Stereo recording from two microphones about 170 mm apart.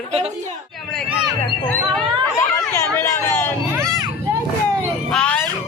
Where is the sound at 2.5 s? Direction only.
15° left (ahead or behind).